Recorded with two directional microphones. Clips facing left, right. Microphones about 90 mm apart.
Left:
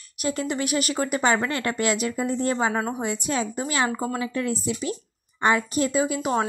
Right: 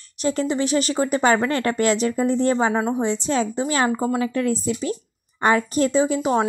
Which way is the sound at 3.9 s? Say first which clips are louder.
Right 5 dB; 25° right (ahead or behind).